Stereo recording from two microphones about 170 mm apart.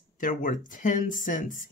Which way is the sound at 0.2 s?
50° left (ahead or behind).